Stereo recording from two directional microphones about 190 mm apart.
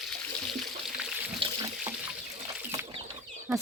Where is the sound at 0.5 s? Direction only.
Centre (ahead or behind).